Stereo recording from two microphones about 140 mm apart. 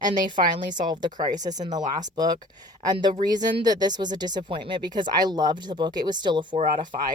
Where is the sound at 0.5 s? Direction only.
30° right (ahead or behind).